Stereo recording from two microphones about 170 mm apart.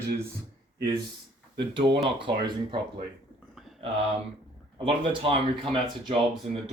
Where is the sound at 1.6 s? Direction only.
30° right (ahead or behind).